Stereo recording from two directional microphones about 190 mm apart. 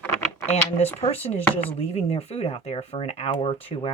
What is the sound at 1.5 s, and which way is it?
Speech, 30° left (ahead or behind).